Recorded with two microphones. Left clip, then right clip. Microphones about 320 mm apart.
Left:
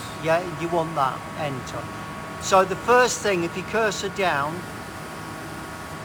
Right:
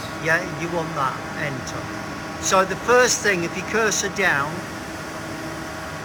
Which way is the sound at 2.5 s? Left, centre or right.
Centre.